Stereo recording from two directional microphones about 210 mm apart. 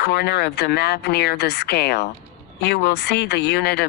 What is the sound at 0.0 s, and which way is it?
Speech, 50° left (ahead or behind).